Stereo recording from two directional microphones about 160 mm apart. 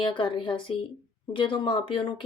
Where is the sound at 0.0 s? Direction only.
30° left (ahead or behind).